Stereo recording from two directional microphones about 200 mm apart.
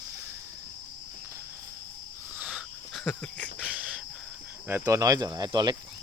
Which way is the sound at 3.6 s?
5° right (ahead or behind).